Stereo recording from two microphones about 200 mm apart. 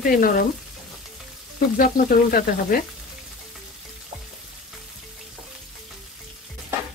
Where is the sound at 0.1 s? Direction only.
45° left (ahead or behind).